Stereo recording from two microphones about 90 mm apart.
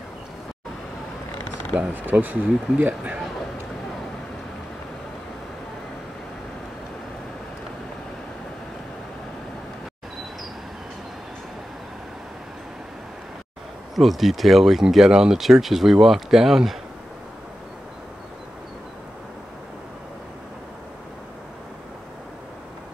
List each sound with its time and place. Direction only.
1.8 s speech: 15° right (ahead or behind)
13.9 s speech: centre (ahead or behind)